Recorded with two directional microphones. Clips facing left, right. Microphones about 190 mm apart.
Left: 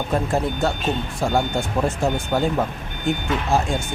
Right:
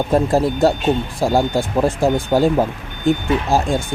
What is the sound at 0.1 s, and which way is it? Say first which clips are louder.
Speech: right 6 dB; 35° right (ahead or behind).